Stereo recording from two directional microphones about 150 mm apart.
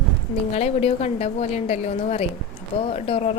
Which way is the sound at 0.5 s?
45° left (ahead or behind).